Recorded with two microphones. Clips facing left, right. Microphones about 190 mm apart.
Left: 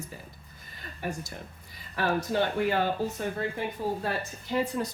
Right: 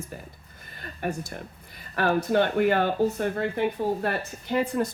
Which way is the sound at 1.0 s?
60° right (ahead or behind).